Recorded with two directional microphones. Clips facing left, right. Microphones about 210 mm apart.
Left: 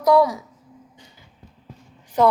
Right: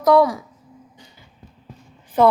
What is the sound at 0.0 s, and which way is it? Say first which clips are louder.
Speech: right 1 dB; 10° left (ahead or behind).